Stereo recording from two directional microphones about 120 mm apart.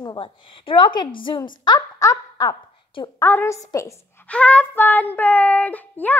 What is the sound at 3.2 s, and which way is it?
Child singing, 20° left (ahead or behind).